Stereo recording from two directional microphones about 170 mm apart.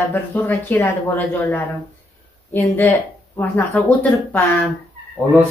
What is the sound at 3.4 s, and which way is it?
Speech, 10° left (ahead or behind).